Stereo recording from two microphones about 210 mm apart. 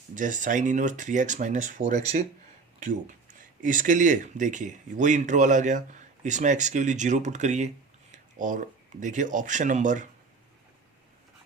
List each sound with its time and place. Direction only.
0.2 s speech: 35° right (ahead or behind)